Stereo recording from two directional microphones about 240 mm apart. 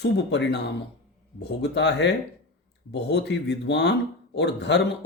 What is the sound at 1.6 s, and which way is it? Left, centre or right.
Speech, left.